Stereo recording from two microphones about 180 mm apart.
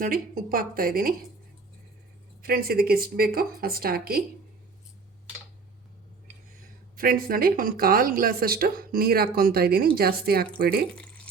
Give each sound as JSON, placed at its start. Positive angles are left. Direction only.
{"t": 0.0, "sound": "a woman's voice", "side_deg": -50}
{"t": 2.4, "sound": "speech", "side_deg": -55}
{"t": 6.9, "sound": "speech", "side_deg": -55}